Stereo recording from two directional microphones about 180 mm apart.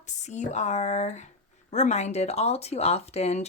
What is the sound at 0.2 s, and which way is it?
Speech, 40° left (ahead or behind).